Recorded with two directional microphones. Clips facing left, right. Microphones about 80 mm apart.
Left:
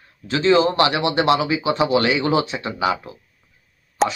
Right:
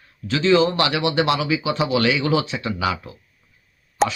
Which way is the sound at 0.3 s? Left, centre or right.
Left.